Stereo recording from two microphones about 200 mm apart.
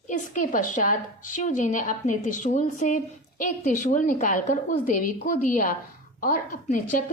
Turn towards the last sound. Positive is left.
turn(degrees=40)  # may be behind; listen again after turning